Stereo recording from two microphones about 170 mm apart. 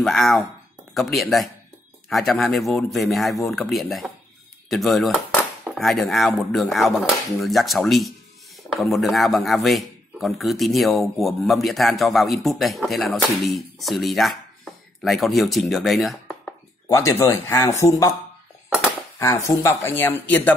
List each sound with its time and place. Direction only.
0.0 s a man's voice: centre (ahead or behind)
16.9 s speech: 15° left (ahead or behind)
19.1 s speech: 15° left (ahead or behind)